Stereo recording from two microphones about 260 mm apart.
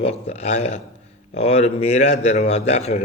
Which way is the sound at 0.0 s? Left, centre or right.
Left.